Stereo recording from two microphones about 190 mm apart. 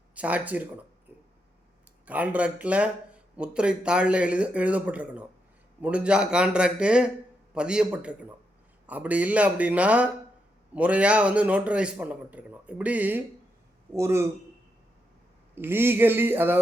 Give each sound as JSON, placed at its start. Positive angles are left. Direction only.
{"t": 0.1, "sound": "speech", "side_deg": -5}
{"t": 2.0, "sound": "a man's voice", "side_deg": -10}
{"t": 15.5, "sound": "speech", "side_deg": -10}